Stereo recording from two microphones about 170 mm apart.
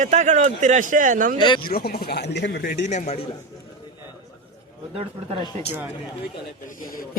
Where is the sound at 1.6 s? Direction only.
65° left (ahead or behind).